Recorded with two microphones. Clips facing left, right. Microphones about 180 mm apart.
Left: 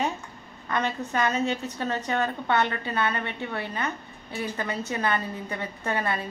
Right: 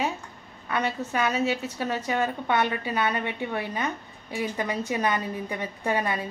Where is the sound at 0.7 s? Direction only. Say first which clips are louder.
Even; 10° right (ahead or behind).